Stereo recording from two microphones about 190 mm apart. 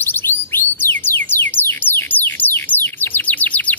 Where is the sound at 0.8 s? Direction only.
10° left (ahead or behind).